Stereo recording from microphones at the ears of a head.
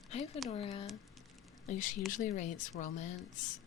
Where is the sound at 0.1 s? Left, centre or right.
Left.